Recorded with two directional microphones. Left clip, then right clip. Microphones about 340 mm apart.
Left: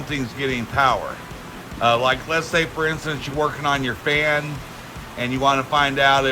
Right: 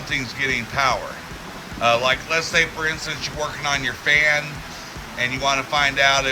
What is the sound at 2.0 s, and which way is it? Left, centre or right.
Speech, centre.